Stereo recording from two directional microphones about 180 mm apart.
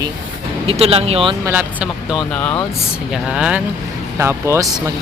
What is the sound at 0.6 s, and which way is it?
Speech, 35° right (ahead or behind).